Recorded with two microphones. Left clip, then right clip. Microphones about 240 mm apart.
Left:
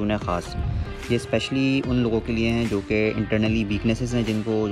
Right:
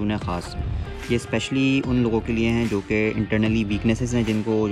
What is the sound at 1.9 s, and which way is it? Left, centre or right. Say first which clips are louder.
Speech: right 1 dB; centre.